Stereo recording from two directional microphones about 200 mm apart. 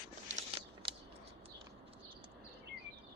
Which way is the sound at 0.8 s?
25° right (ahead or behind).